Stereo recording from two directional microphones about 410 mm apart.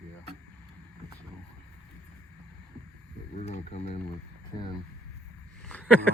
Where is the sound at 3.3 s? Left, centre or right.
Centre.